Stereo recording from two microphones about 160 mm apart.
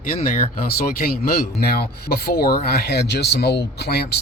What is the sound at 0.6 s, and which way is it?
Speech, 70° left (ahead or behind).